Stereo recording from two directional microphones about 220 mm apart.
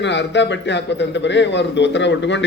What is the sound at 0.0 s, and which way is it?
A man's voice, 55° left (ahead or behind).